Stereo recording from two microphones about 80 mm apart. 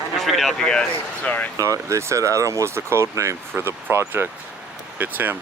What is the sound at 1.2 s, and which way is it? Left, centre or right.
Speech, centre.